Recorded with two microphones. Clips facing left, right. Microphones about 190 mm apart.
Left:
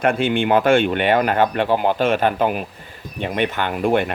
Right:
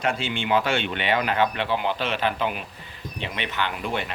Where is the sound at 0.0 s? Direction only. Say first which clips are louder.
Left 8 dB; 55° left (ahead or behind).